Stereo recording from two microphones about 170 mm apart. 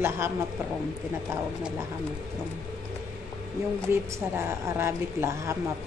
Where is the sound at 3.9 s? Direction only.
15° right (ahead or behind).